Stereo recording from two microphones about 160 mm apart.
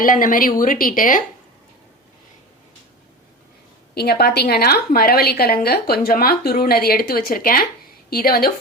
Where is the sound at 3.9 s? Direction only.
80° left.